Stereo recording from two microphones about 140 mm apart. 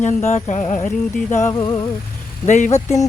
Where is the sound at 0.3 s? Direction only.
55° left (ahead or behind).